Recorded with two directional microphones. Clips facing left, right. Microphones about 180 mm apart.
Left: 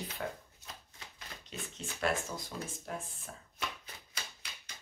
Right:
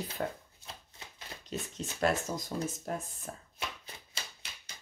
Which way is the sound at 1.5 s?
40° right (ahead or behind).